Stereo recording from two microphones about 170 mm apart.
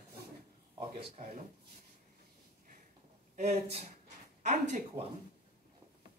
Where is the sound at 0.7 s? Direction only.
40° right (ahead or behind).